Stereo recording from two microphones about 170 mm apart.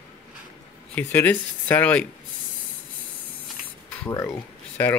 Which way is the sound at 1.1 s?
10° left (ahead or behind).